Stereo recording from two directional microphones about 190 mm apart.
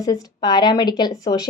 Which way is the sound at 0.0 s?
20° left (ahead or behind).